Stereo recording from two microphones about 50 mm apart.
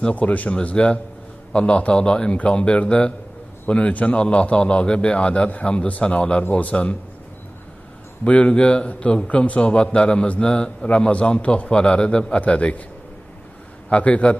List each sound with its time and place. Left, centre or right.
0.1 s a man's voice: left
8.2 s a man's voice: left
13.8 s a man's voice: left